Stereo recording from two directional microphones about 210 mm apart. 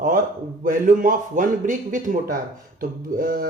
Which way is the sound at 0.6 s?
40° right (ahead or behind).